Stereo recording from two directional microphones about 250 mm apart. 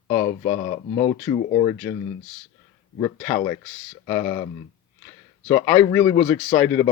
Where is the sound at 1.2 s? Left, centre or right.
Centre.